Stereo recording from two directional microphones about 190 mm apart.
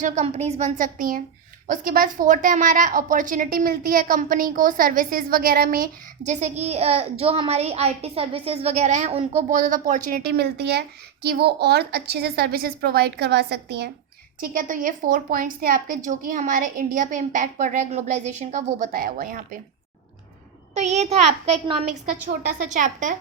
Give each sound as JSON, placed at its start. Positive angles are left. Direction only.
{"t": 0.0, "sound": "a woman's voice", "side_deg": -35}
{"t": 14.4, "sound": "a woman's voice", "side_deg": -45}
{"t": 20.7, "sound": "a woman's voice", "side_deg": -35}